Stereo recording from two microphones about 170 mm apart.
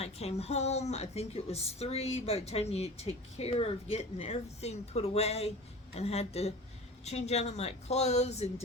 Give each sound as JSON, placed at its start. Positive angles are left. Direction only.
{"t": 0.0, "sound": "a woman's voice", "side_deg": 40}